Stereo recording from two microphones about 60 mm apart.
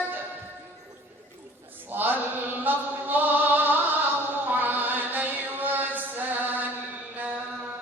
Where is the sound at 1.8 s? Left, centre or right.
Right.